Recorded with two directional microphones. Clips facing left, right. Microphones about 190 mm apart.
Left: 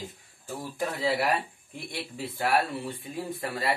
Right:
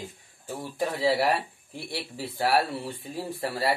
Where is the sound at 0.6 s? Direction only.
30° right (ahead or behind).